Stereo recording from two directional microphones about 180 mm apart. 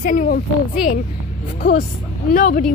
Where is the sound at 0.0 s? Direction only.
50° left (ahead or behind).